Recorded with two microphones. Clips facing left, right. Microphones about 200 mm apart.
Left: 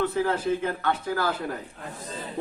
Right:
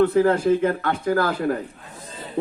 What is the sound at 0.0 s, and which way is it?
Speech, 50° right (ahead or behind).